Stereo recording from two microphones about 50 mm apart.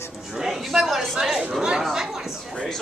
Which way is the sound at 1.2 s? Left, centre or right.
Centre.